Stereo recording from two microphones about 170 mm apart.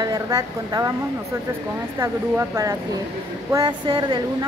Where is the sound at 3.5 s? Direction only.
25° right (ahead or behind).